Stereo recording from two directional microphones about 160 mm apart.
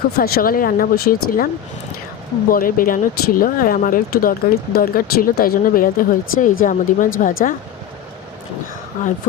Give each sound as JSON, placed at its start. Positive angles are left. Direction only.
{"t": 0.2, "sound": "speech", "side_deg": 65}
{"t": 2.5, "sound": "speech", "side_deg": 60}